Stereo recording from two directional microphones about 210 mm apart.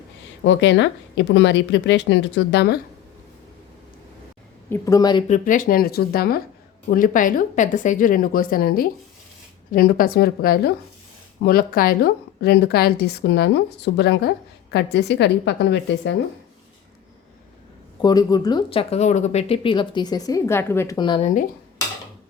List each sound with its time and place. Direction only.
0.4 s speech: 60° left (ahead or behind)
4.7 s speech: 15° left (ahead or behind)
5.3 s a woman's voice: 40° left (ahead or behind); by 16.1 s 55° left (ahead or behind)
18.0 s speech: 20° left (ahead or behind)